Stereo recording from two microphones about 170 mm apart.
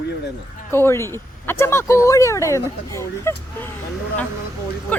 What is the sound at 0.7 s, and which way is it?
Speech, 15° left (ahead or behind).